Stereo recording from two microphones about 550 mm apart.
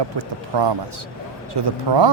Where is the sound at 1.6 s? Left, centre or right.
Right.